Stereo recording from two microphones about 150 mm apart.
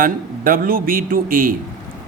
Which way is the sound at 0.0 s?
70° right (ahead or behind).